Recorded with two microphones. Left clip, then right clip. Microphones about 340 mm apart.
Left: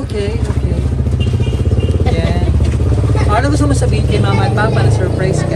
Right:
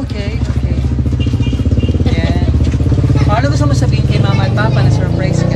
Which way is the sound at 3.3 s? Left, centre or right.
Centre.